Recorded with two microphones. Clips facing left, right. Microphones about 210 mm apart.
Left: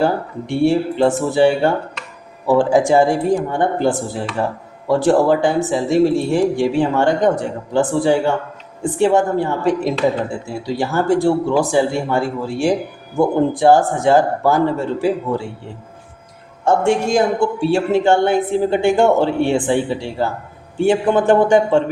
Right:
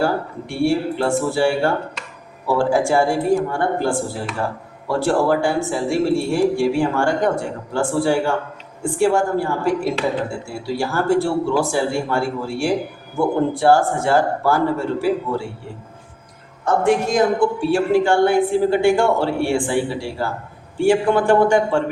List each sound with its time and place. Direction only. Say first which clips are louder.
0.0 s a woman's voice: left 2 dB; 20° left (ahead or behind)
16.6 s a woman's voice: left 2 dB; 25° left (ahead or behind)